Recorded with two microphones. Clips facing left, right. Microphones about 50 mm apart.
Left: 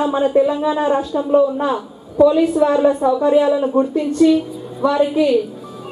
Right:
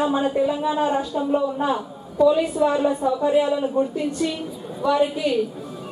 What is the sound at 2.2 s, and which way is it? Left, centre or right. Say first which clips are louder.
Speech: left 5 dB; centre.